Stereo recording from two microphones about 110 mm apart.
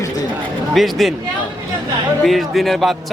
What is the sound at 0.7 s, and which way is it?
Speech, centre (ahead or behind).